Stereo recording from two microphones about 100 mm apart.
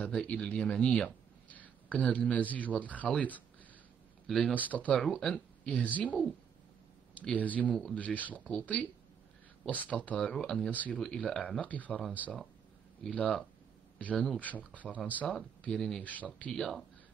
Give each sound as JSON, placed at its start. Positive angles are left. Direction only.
{"t": 0.0, "sound": "speech", "side_deg": 10}
{"t": 4.6, "sound": "speech", "side_deg": 15}
{"t": 4.9, "sound": "speech", "side_deg": 5}
{"t": 5.9, "sound": "speech", "side_deg": 15}
{"t": 10.7, "sound": "speech", "side_deg": 15}
{"t": 13.1, "sound": "speech", "side_deg": 15}
{"t": 16.5, "sound": "speech", "side_deg": 5}